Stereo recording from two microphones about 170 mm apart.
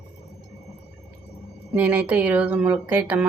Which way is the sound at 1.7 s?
5° right (ahead or behind).